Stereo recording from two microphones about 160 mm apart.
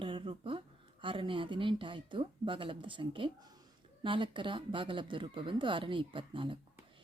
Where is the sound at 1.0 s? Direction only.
30° right (ahead or behind).